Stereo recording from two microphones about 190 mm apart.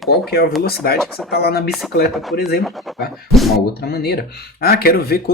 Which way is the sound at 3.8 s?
55° left (ahead or behind).